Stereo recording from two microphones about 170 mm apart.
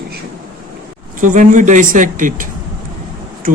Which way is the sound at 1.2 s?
50° right (ahead or behind).